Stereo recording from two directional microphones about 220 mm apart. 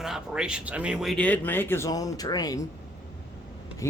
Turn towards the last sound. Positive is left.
turn(degrees=15)  # may be behind; listen again after turning